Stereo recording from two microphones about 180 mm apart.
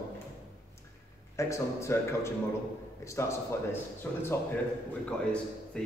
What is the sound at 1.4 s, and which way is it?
A man's voice, 15° left (ahead or behind).